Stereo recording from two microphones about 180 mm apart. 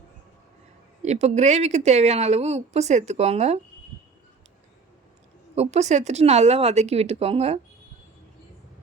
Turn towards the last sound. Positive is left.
turn(degrees=-35)  # may be behind; listen again after turning